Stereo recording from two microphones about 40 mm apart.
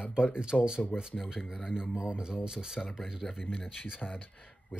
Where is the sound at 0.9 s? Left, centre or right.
Centre.